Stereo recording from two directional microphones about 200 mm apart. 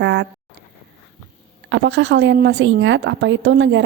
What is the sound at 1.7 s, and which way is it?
A woman's voice, 65° right (ahead or behind).